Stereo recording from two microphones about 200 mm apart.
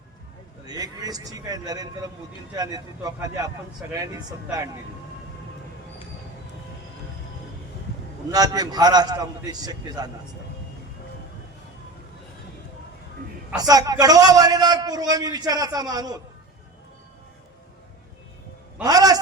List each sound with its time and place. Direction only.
0.6 s a man's voice: 20° right (ahead or behind)
8.3 s a man's voice: 20° right (ahead or behind)
13.6 s a man's voice: 20° right (ahead or behind)
18.8 s a sound: 20° right (ahead or behind)